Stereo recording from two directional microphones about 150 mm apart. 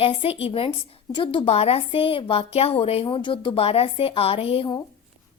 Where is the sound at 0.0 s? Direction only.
40° left (ahead or behind).